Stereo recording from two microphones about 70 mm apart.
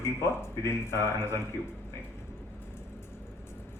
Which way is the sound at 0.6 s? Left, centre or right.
Left.